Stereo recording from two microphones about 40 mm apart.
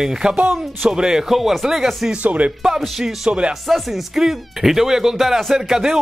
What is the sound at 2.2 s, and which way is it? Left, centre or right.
Speech, right.